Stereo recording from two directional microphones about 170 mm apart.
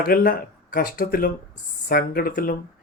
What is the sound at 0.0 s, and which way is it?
Speech, 60° left (ahead or behind).